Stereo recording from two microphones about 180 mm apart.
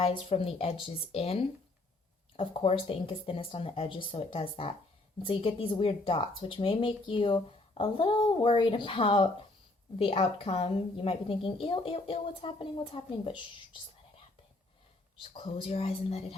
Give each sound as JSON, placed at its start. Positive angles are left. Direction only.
{"t": 0.0, "sound": "a woman's voice", "side_deg": 30}
{"t": 15.2, "sound": "a woman's voice", "side_deg": 30}